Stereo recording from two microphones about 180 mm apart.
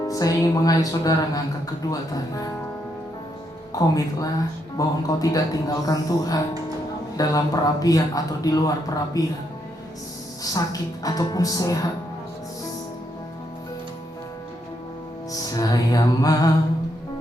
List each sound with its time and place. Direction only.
0.0 s a man's voice: 20° left (ahead or behind)
3.8 s a man's voice: 20° left (ahead or behind)
10.4 s a man's voice: 20° left (ahead or behind)
15.3 s music: 20° left (ahead or behind)